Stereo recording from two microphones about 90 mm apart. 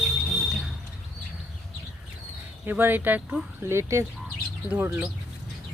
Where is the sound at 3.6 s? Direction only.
30° right (ahead or behind).